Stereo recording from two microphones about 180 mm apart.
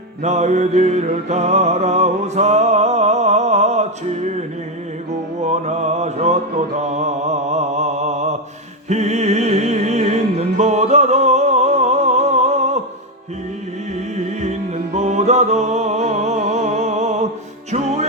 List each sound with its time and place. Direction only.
0.2 s music: 40° right (ahead or behind)
5.4 s music: 40° right (ahead or behind)
14.9 s music: 40° right (ahead or behind)